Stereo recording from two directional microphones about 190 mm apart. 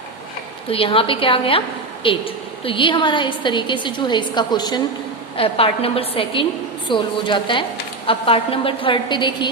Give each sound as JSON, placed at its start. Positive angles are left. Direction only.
{"t": 0.7, "sound": "a woman's voice", "side_deg": 30}